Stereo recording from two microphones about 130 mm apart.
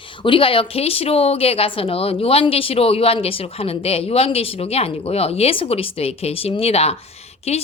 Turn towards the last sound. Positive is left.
turn(degrees=55)  # may be behind; listen again after turning